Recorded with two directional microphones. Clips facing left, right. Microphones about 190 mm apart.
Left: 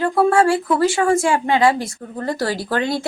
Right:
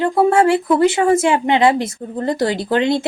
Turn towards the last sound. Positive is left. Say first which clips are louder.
# right 5 dB
turn(degrees=-20)  # may be behind; listen again after turning